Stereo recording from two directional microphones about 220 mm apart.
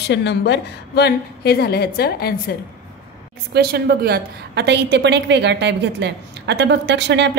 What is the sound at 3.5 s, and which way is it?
A woman's voice, 45° right (ahead or behind).